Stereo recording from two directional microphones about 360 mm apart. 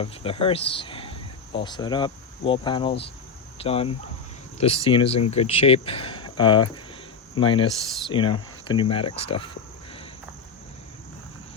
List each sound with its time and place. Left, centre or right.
0.0 s speech: centre